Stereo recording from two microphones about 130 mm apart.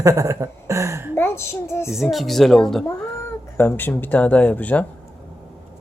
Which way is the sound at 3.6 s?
15° left (ahead or behind).